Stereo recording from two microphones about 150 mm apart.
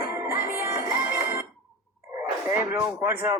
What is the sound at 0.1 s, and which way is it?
Music, 15° right (ahead or behind).